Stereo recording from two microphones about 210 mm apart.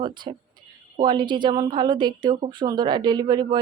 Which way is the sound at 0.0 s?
20° right (ahead or behind).